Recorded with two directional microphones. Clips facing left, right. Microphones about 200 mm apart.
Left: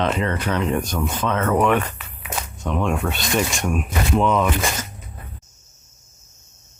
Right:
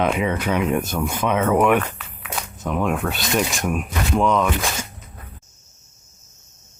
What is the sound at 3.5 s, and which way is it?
Speech, centre (ahead or behind).